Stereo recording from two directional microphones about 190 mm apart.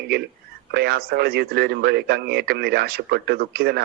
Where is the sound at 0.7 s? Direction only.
55° right (ahead or behind).